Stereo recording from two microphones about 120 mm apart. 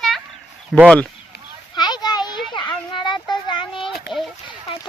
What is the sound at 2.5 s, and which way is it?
Children playing, 40° left (ahead or behind).